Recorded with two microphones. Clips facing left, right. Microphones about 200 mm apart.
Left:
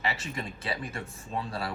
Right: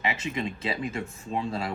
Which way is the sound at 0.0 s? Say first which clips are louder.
Right 4 dB; 20° right (ahead or behind).